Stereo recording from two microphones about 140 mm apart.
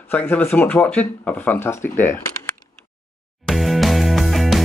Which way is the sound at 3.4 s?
Centre (ahead or behind).